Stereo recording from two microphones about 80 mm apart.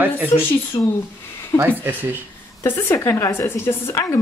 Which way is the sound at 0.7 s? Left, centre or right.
Left.